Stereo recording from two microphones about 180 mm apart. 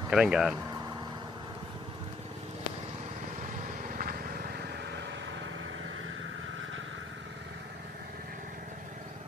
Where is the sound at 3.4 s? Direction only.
50° right (ahead or behind); by 5.5 s 80° right.